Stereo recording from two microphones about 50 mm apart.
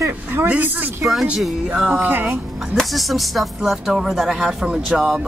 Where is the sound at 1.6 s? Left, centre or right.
Centre.